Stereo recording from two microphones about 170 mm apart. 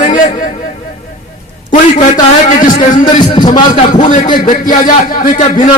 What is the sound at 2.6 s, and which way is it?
Speech, 50° left (ahead or behind).